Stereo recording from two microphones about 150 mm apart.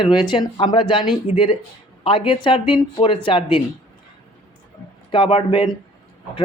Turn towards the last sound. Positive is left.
turn(degrees=35)  # may be behind; listen again after turning